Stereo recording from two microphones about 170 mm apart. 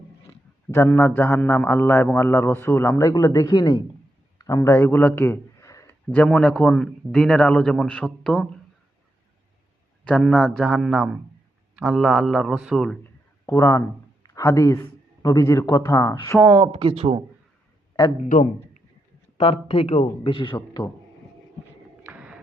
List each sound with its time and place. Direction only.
0.7 s a man's voice: 15° left (ahead or behind)
4.4 s a sound: 20° left (ahead or behind)
6.1 s a man's voice: 5° left (ahead or behind)
10.0 s a man's voice: 5° left (ahead or behind)
13.4 s a man's voice: 15° left (ahead or behind)
16.6 s speech: 30° right (ahead or behind)
18.2 s a man's voice: 45° left (ahead or behind)
19.4 s speech: 35° left (ahead or behind)
22.0 s a sound: 10° right (ahead or behind)